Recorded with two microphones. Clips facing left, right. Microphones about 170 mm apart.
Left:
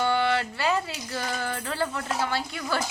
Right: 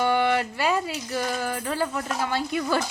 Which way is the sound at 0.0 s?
15° right (ahead or behind).